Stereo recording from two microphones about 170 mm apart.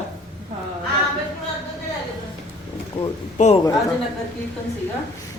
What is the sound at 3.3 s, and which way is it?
Speech, 40° left (ahead or behind).